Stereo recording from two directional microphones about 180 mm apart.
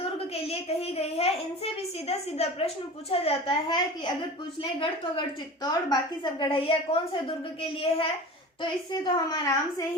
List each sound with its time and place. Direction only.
0.0 s a sound: 35° left (ahead or behind)
3.1 s a woman's voice: 30° left (ahead or behind)
5.6 s a woman's voice: 25° left (ahead or behind)